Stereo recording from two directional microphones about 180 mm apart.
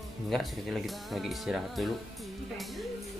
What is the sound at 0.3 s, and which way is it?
Speech, centre (ahead or behind).